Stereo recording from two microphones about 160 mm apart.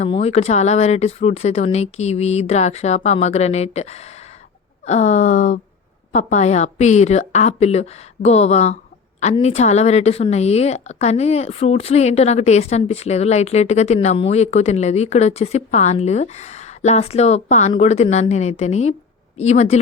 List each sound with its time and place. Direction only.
0.0 s a woman's voice: 40° left (ahead or behind)